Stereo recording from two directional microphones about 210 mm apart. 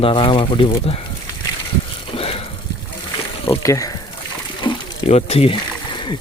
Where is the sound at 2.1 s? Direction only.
25° left (ahead or behind).